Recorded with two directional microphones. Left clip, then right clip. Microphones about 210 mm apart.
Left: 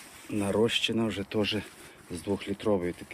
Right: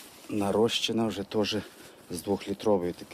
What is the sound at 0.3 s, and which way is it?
Speech, 5° right (ahead or behind).